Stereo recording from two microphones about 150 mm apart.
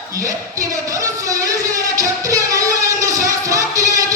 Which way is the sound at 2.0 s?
20° right (ahead or behind).